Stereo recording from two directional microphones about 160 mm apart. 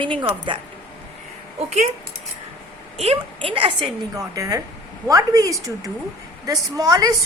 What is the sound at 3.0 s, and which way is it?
Speech, 40° right (ahead or behind).